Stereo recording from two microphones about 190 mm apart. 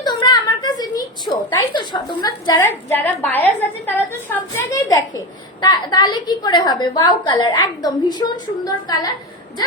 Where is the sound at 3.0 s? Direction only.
10° left (ahead or behind).